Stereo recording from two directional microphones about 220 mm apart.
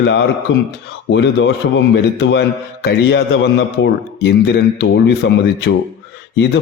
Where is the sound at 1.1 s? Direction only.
50° left (ahead or behind).